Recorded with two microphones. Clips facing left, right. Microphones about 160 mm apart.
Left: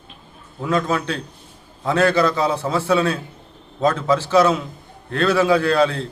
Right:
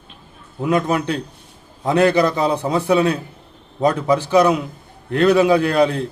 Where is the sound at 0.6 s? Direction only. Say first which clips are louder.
Right 3 dB; 15° right (ahead or behind).